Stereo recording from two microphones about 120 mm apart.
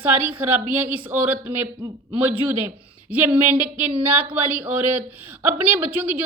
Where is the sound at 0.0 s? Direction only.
15° right (ahead or behind).